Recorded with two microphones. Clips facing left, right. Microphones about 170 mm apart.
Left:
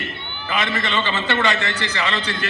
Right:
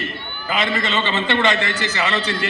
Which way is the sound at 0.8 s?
20° right (ahead or behind).